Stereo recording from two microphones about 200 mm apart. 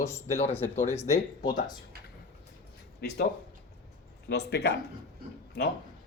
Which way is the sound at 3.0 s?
55° left (ahead or behind).